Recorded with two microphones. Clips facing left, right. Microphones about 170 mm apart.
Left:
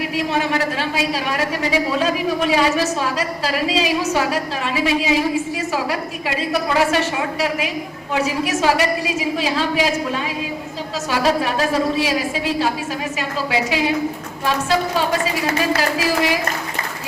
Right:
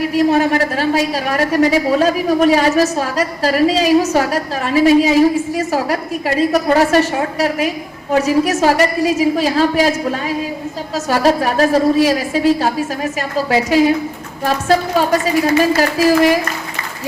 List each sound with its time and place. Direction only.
0.0 s a woman's voice: 40° right (ahead or behind)